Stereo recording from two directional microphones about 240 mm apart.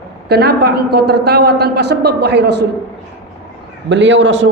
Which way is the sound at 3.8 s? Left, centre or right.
Right.